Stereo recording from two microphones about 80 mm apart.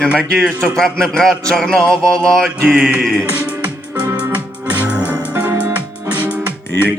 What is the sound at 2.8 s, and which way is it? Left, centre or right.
Music, centre.